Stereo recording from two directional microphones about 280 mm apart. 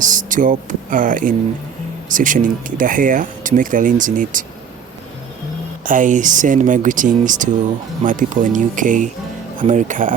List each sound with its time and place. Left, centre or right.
0.0 s speech: right
5.8 s speech: right